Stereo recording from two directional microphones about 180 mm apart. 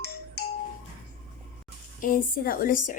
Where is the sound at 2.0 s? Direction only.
50° left (ahead or behind).